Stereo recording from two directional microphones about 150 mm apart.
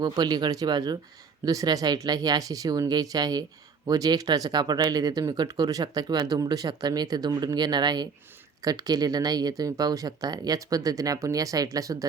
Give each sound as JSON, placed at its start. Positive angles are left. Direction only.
{"t": 0.0, "sound": "speech", "side_deg": -25}